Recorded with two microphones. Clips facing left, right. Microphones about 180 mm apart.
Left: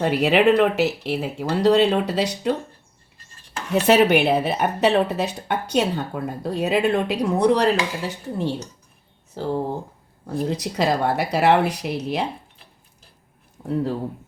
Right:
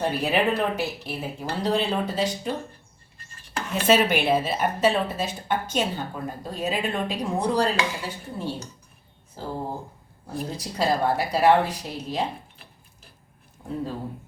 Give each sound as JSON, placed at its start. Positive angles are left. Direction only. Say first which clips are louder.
{"t": 0.0, "sound": "speech", "louder": "left 6 dB", "side_deg": 80}
{"t": 3.7, "sound": "speech", "louder": "left 5 dB", "side_deg": 70}